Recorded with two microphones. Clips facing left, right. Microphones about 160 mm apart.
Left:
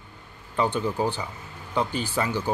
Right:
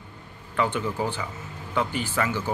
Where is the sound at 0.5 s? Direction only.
30° left (ahead or behind).